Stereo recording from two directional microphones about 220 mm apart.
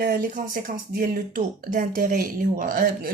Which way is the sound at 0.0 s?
40° right (ahead or behind).